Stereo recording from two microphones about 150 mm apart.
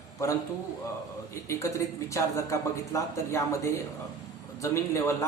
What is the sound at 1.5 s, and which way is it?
Speech, 20° left (ahead or behind).